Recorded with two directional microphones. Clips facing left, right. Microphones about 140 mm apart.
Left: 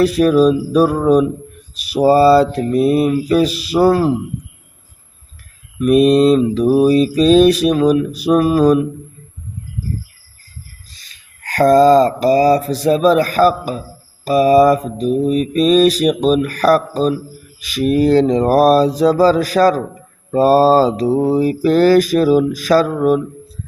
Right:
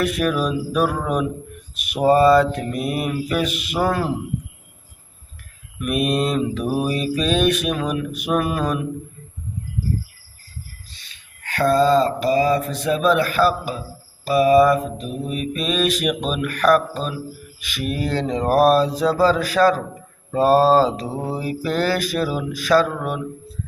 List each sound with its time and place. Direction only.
0.0 s mantra: 35° left (ahead or behind)
5.8 s mantra: 35° left (ahead or behind)
10.9 s mantra: 40° left (ahead or behind)